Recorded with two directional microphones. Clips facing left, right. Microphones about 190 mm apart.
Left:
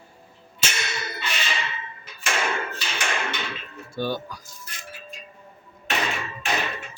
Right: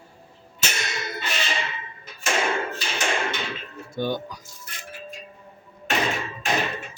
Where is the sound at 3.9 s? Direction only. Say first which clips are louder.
Right 1 dB; 20° right (ahead or behind).